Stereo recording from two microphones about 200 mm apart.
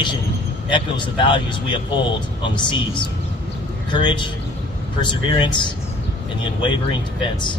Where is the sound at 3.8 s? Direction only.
25° left (ahead or behind).